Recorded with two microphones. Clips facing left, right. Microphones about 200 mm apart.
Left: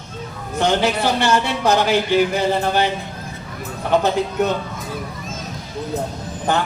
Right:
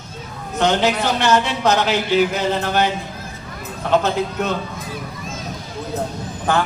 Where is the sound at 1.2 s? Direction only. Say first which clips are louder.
Right 3 dB; 10° left (ahead or behind).